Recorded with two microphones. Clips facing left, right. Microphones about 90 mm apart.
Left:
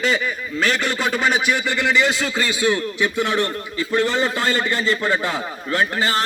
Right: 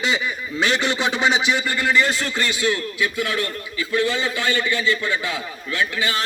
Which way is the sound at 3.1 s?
30° left (ahead or behind).